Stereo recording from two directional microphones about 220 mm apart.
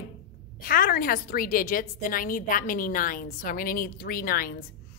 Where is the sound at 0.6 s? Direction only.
40° left (ahead or behind).